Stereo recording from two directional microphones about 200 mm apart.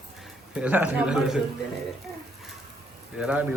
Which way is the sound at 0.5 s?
5° right (ahead or behind).